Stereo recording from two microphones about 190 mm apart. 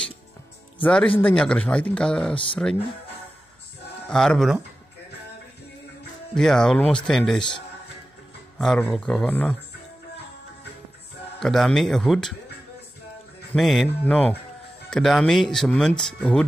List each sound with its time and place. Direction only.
0.8 s speech: 5° left (ahead or behind)
4.1 s speech: 5° left (ahead or behind)
6.3 s speech: 5° left (ahead or behind)
8.5 s speech: 5° left (ahead or behind)
11.3 s speech: centre (ahead or behind)
13.5 s speech: centre (ahead or behind)